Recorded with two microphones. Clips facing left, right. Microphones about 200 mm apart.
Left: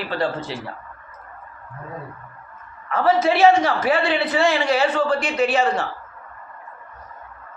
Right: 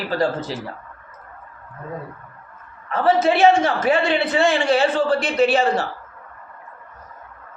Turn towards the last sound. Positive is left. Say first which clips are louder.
# right 2 dB
turn(degrees=-35)  # may be behind; listen again after turning